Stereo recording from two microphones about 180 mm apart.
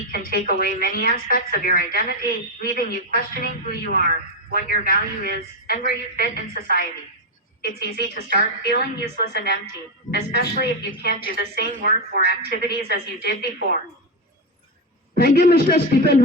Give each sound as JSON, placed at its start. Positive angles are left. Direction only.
{"t": 0.1, "sound": "a woman's voice", "side_deg": 55}
{"t": 15.1, "sound": "a woman's voice", "side_deg": 60}